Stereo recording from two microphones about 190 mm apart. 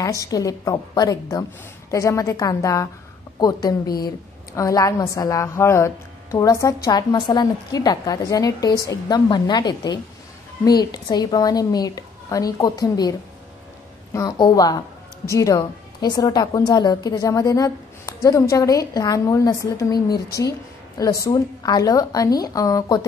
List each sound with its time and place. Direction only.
0.0 s a woman's voice: 15° left (ahead or behind)
14.1 s a woman's voice: 20° left (ahead or behind)